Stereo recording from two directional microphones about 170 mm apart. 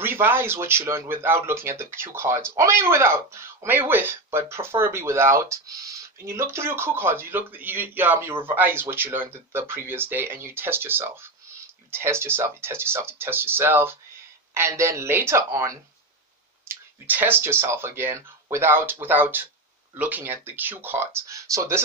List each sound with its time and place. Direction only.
0.0 s speech: 15° right (ahead or behind)